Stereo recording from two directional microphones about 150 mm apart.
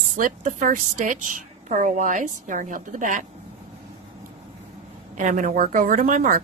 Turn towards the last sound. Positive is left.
turn(degrees=-60)  # may be behind; listen again after turning